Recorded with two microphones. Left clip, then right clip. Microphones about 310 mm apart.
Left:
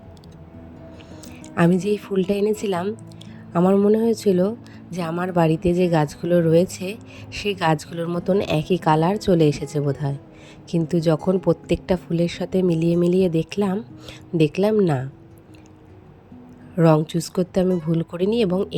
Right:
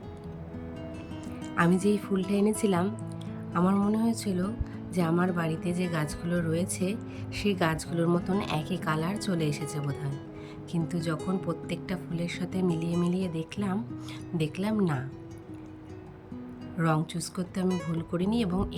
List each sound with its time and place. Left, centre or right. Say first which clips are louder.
1.5 s speech: left 6 dB; centre
16.7 s speech: left 12 dB; centre